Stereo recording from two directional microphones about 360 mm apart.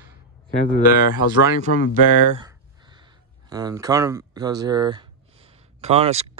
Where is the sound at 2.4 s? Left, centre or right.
Centre.